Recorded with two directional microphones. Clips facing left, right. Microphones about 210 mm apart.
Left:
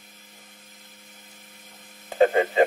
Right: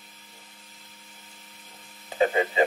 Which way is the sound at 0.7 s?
55° left (ahead or behind).